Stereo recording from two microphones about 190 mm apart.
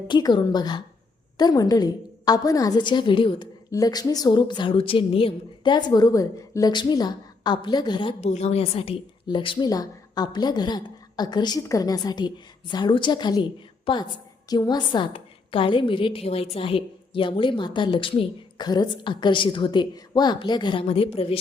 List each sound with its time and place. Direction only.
0.1 s a woman's voice: 25° left (ahead or behind)